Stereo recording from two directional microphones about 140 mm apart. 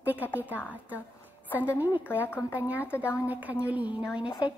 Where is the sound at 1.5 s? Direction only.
10° right (ahead or behind).